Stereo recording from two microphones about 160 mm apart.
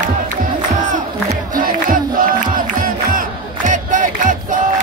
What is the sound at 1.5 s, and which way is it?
Music, 60° right (ahead or behind).